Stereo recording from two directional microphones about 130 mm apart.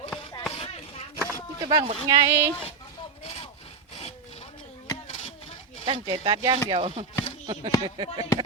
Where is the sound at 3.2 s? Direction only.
50° left (ahead or behind).